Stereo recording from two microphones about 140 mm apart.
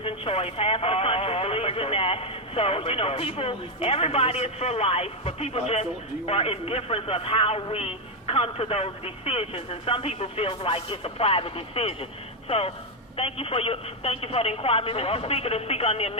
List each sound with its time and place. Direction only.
0.0 s speech: 45° left (ahead or behind)